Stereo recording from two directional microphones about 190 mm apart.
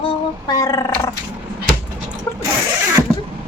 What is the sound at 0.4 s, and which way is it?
Roar, 20° left (ahead or behind).